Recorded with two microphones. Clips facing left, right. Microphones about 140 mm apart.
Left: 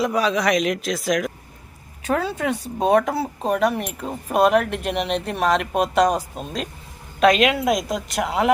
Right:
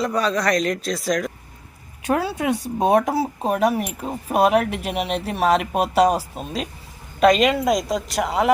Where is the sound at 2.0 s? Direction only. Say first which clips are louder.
Right 1 dB; 10° right (ahead or behind).